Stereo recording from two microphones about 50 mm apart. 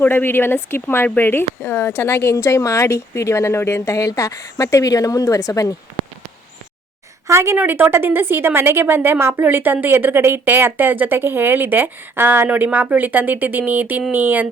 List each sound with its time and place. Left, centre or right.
0.0 s speech: left
7.3 s a woman's voice: right
7.5 s speech: right
9.4 s speech: right